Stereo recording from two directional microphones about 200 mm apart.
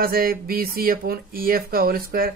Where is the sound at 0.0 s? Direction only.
50° right (ahead or behind).